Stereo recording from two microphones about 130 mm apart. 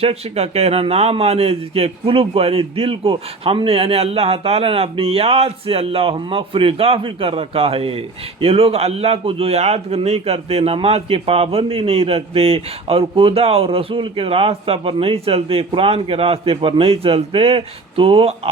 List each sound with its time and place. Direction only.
0.0 s speech: 50° right (ahead or behind)